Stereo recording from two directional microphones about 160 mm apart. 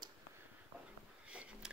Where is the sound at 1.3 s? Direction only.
5° right (ahead or behind).